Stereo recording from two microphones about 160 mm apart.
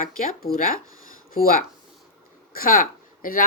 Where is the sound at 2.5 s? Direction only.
65° left (ahead or behind).